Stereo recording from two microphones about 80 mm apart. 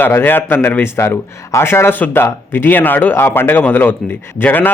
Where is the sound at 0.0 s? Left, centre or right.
Left.